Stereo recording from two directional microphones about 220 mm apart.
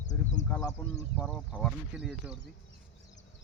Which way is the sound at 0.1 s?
35° left (ahead or behind).